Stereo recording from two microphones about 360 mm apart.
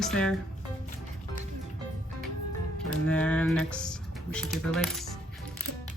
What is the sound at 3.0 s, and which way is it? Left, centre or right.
Speech, centre.